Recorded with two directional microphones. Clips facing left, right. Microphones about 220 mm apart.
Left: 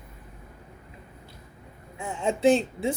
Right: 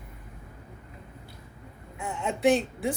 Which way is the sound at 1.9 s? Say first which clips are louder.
Left 4 dB; 30° left (ahead or behind).